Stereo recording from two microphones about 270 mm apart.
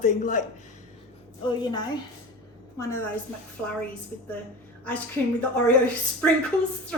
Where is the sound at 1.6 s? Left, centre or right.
Centre.